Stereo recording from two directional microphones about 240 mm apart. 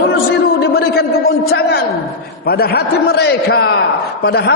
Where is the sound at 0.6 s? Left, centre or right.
Left.